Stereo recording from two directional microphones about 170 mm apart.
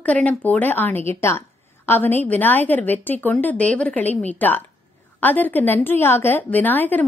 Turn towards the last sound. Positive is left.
turn(degrees=10)  # may be behind; listen again after turning